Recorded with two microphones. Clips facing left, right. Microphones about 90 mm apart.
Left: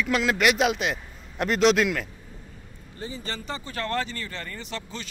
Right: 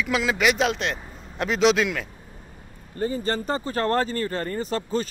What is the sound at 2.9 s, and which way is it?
Speech, 45° right (ahead or behind).